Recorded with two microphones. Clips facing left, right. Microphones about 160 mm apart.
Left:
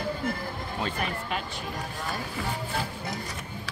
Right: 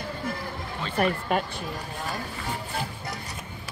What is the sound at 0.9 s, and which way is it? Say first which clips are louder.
Speech: right 7 dB; 50° right (ahead or behind).